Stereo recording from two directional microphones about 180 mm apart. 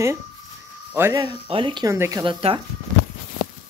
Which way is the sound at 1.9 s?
15° right (ahead or behind).